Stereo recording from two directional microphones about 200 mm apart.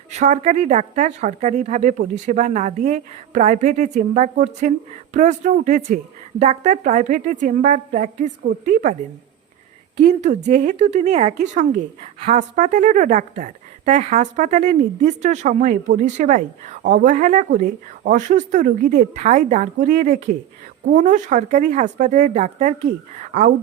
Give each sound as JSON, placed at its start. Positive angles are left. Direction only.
{"t": 0.1, "sound": "a woman's voice", "side_deg": -35}
{"t": 10.0, "sound": "a woman's voice", "side_deg": -35}